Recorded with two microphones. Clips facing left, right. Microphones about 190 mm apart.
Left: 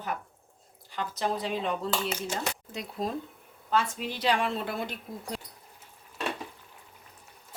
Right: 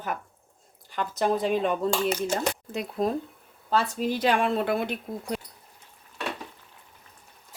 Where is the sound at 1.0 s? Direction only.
50° right (ahead or behind).